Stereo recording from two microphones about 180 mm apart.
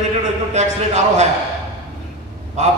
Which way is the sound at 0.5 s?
40° right (ahead or behind).